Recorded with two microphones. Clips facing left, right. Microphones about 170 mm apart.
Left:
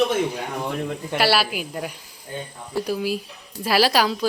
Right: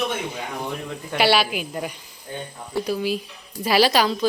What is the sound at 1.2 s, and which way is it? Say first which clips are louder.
A woman's voice: right 2 dB; 5° left (ahead or behind).